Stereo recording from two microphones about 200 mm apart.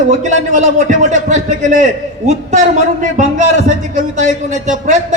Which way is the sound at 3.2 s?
40° right (ahead or behind).